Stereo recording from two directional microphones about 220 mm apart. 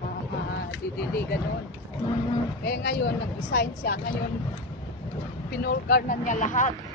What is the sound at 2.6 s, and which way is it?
Speech, 45° left (ahead or behind).